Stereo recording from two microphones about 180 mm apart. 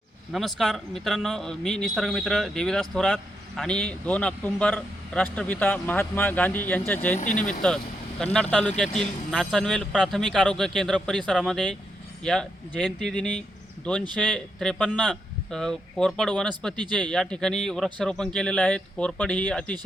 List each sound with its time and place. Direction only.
0.3 s speech: centre (ahead or behind)
7.2 s speech: 45° left (ahead or behind)
8.2 s speech: 5° left (ahead or behind)